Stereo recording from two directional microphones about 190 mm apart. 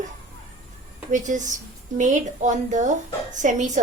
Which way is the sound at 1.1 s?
40° right (ahead or behind).